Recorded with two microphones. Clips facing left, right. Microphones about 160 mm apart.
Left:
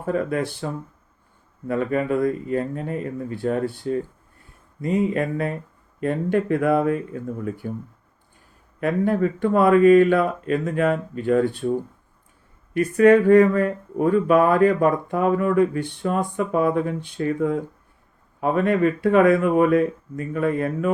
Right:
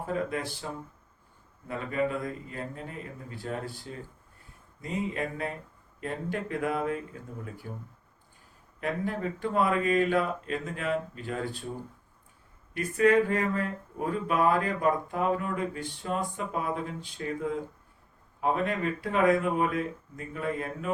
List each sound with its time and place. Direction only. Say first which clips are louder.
0.0 s speech: left 8 dB; 65° left (ahead or behind)
8.8 s speech: left 10 dB; 65° left (ahead or behind)
12.7 s speech: left 8 dB; 65° left (ahead or behind)